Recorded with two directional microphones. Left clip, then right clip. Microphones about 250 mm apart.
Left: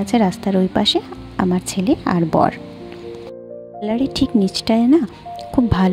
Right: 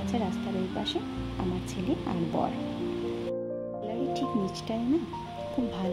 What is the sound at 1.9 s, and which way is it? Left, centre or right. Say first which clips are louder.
Speech: left 14 dB; left.